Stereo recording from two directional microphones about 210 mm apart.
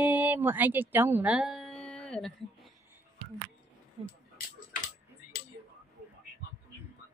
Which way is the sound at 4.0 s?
25° right (ahead or behind).